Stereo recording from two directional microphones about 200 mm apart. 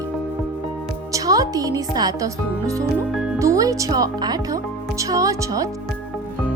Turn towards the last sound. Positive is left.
turn(degrees=-15)  # may be behind; listen again after turning